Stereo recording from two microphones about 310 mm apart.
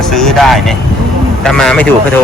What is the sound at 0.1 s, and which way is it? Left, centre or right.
Vehicle, centre.